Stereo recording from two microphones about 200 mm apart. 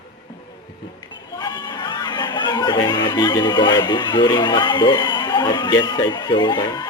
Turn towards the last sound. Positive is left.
turn(degrees=20)  # may be behind; listen again after turning